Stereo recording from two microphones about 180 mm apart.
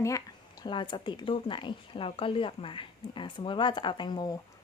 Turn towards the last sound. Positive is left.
turn(degrees=25)  # may be behind; listen again after turning